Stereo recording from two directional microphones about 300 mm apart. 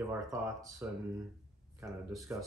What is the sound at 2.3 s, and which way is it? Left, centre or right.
Speech, centre.